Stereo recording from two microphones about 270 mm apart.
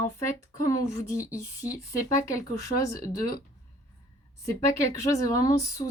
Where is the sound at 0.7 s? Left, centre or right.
Centre.